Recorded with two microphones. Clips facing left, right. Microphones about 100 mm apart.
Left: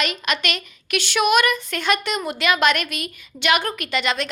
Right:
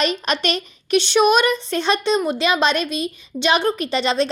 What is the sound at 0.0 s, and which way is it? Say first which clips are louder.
A woman's voice: right 4 dB; 35° right (ahead or behind).